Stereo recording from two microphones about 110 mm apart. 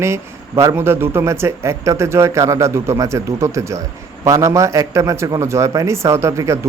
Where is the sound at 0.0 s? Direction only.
25° right (ahead or behind).